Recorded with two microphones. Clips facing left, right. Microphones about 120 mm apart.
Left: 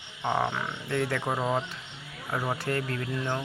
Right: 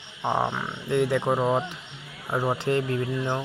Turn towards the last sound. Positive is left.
turn(degrees=-20)  # may be behind; listen again after turning